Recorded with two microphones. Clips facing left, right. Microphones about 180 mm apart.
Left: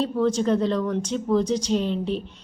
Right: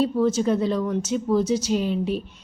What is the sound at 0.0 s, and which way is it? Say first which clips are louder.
Speech: right 1 dB; 5° right (ahead or behind).